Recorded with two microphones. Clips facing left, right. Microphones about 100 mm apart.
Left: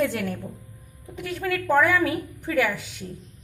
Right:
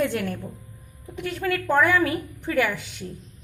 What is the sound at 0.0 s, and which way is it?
A woman's voice, centre (ahead or behind).